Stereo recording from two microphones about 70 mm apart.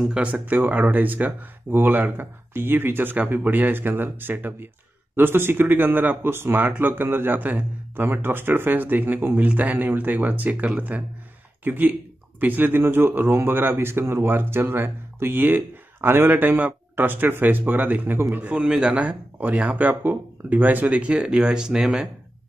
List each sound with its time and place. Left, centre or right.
0.0 s speech: centre